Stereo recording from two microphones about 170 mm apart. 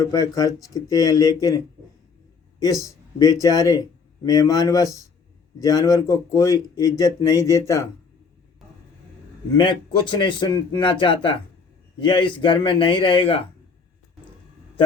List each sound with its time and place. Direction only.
0.0 s speech: 20° left (ahead or behind)
2.6 s a man's voice: 20° left (ahead or behind)
9.6 s speech: 30° left (ahead or behind)